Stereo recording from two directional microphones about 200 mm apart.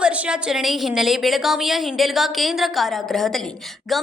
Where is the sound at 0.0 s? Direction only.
5° right (ahead or behind).